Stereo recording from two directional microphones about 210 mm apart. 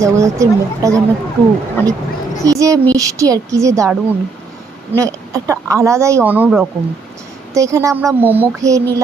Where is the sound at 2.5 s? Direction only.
15° right (ahead or behind).